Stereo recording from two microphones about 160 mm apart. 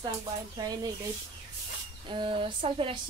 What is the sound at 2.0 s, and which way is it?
Speech, 30° right (ahead or behind).